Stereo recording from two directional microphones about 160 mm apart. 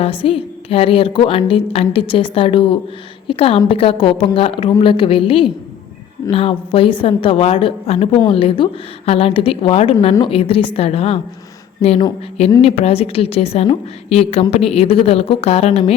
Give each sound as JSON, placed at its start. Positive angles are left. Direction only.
{"t": 0.2, "sound": "a woman's voice", "side_deg": 35}
{"t": 12.6, "sound": "a woman's voice", "side_deg": 40}